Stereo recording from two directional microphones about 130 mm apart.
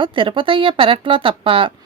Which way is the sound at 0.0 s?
40° right (ahead or behind).